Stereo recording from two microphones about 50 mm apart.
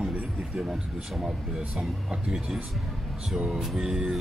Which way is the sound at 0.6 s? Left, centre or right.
Centre.